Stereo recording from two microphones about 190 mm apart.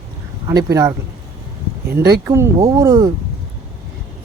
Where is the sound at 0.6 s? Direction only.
15° right (ahead or behind).